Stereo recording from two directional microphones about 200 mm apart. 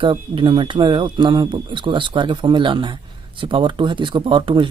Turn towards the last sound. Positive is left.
turn(degrees=-25)  # may be behind; listen again after turning